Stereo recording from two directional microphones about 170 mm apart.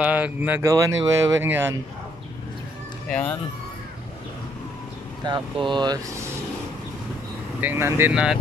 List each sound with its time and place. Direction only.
0.0 s speech: 10° right (ahead or behind)
3.1 s speech: 10° left (ahead or behind)
5.2 s speech: 25° right (ahead or behind)
7.6 s speech: 15° right (ahead or behind)